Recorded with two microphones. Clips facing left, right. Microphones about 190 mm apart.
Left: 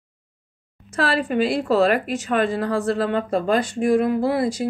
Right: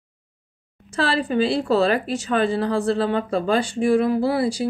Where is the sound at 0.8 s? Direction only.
30° right (ahead or behind).